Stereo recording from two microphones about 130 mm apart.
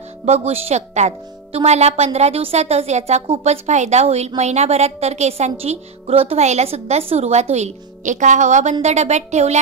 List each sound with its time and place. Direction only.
0.2 s a woman's voice: 55° right (ahead or behind)